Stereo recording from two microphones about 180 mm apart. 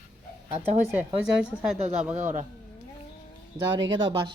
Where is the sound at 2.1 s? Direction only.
45° right (ahead or behind).